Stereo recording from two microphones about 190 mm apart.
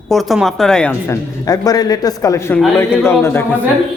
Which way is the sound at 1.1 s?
20° left (ahead or behind).